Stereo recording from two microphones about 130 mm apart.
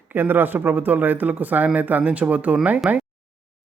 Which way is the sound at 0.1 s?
15° right (ahead or behind).